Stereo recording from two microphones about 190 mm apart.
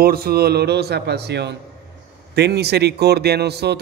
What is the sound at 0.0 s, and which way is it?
A man's voice, 55° right (ahead or behind).